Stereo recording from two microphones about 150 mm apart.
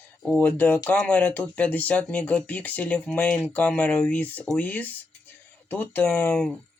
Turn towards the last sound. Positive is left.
turn(degrees=5)  # may be behind; listen again after turning